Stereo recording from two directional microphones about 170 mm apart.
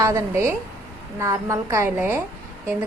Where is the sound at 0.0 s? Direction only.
15° right (ahead or behind).